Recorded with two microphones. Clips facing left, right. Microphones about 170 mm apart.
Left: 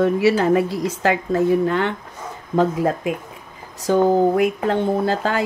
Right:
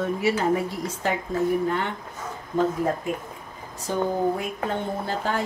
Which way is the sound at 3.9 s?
90° left.